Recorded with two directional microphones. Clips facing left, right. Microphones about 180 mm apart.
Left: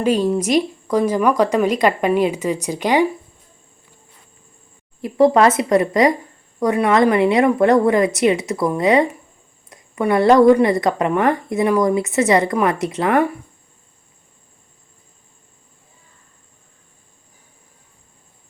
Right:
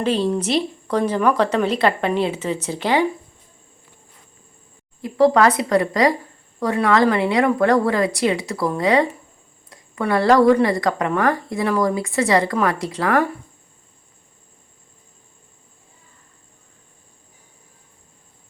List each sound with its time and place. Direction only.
0.0 s a woman's voice: 10° left (ahead or behind)
5.0 s a woman's voice: 25° left (ahead or behind)